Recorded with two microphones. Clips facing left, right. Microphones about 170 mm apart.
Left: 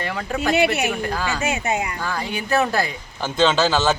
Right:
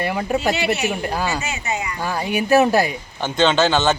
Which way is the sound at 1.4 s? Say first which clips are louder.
Left 3 dB; 55° left (ahead or behind).